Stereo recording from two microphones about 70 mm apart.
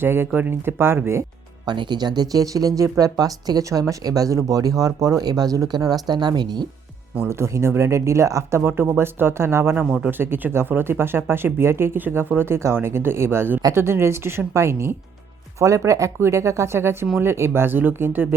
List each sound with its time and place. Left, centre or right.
0.0 s speech: right
1.6 s speech: right
7.3 s speech: right